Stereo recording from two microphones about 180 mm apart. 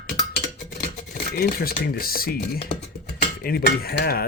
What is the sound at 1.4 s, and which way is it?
Speech, 55° left (ahead or behind).